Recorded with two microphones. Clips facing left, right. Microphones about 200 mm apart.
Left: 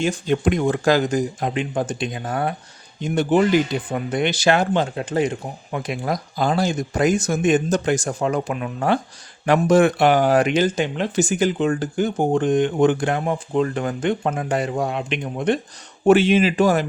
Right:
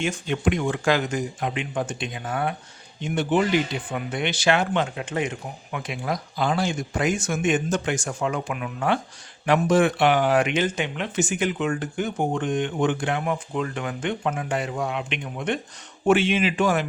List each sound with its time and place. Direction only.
0.0 s speech: 35° left (ahead or behind)